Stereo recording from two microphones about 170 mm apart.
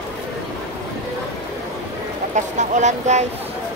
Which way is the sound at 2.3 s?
45° right (ahead or behind).